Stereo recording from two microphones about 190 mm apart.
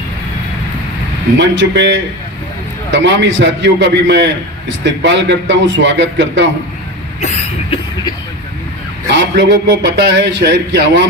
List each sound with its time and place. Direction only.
1.4 s a man's voice: 70° right (ahead or behind)
9.1 s a man's voice: 70° right (ahead or behind)